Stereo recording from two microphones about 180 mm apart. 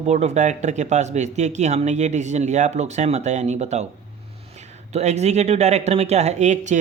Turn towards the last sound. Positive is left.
turn(degrees=-40)  # may be behind; listen again after turning